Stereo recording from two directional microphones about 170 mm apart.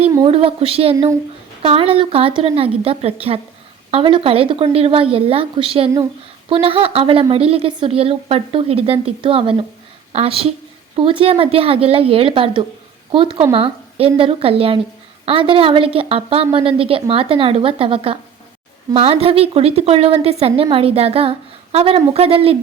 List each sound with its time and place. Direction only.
0.3 s a woman's voice: 35° right (ahead or behind)